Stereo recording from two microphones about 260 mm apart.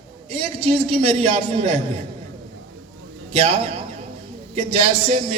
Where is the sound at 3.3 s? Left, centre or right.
Right.